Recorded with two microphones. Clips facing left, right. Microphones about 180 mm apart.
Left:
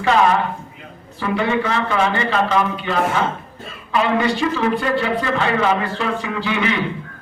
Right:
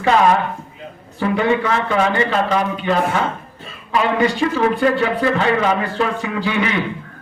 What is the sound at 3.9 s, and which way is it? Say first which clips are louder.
Speech: right 1 dB; 40° right (ahead or behind).